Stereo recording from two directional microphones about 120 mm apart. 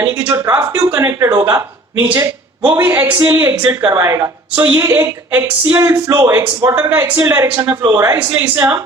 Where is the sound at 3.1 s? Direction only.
35° right (ahead or behind).